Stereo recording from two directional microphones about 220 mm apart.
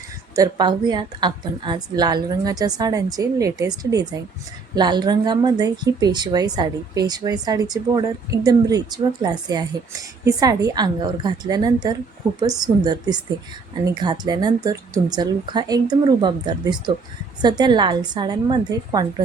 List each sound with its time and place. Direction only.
0.3 s a woman's voice: 20° right (ahead or behind)